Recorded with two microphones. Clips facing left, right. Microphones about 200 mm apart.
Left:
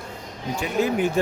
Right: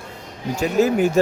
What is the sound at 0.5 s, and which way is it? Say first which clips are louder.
Speech: right 5 dB; 45° right (ahead or behind).